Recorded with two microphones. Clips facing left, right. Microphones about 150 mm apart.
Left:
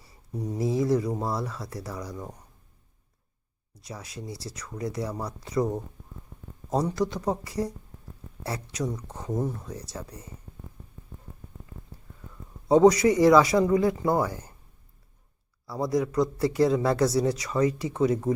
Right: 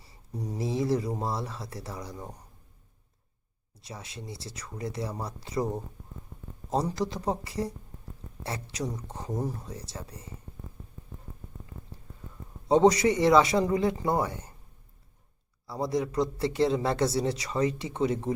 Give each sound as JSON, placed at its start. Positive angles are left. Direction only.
{"t": 0.6, "sound": "speech", "side_deg": -30}
{"t": 3.8, "sound": "a man's voice", "side_deg": -25}
{"t": 6.7, "sound": "a man's voice", "side_deg": -30}
{"t": 12.6, "sound": "a man's voice", "side_deg": -30}
{"t": 15.6, "sound": "a man's voice", "side_deg": -25}